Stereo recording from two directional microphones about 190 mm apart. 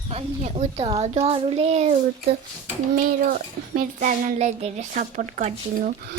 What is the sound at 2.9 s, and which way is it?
A woman's voice, 45° right (ahead or behind).